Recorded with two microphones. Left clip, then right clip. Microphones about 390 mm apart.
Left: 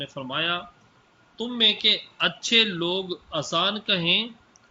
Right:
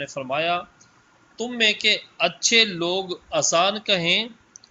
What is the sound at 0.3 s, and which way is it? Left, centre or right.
A man's voice, centre.